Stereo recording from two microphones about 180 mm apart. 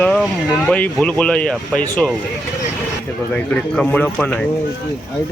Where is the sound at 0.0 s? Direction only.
5° left (ahead or behind).